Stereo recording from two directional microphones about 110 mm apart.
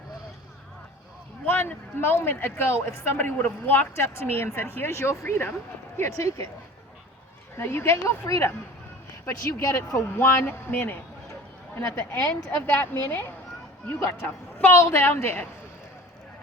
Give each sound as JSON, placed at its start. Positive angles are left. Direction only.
{"t": 1.5, "sound": "speech", "side_deg": 20}
{"t": 7.5, "sound": "speech", "side_deg": 20}
{"t": 14.6, "sound": "speech", "side_deg": 25}